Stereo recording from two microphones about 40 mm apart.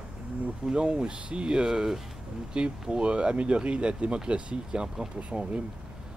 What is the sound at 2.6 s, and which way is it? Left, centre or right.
Speech, right.